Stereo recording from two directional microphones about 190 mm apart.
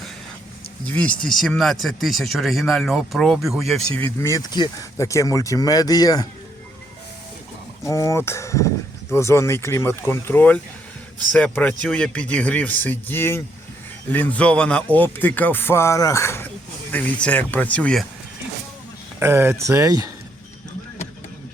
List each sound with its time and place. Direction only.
0.9 s speech: 5° left (ahead or behind)
3.9 s speech: 10° left (ahead or behind)
7.9 s speech: 15° left (ahead or behind)
19.2 s speech: 15° right (ahead or behind)